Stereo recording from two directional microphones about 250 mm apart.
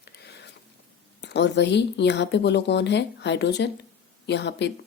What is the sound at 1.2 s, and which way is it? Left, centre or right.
A woman's voice, left.